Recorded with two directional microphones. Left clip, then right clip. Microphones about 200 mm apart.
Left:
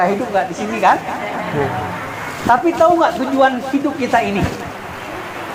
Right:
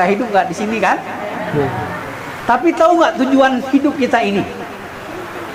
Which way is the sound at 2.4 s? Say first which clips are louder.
Even; 45° right (ahead or behind).